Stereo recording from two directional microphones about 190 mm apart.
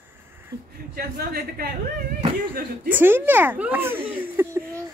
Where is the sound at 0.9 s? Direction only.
55° right (ahead or behind).